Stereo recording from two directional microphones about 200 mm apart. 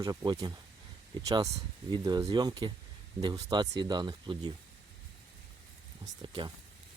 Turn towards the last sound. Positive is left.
turn(degrees=-25)  # may be behind; listen again after turning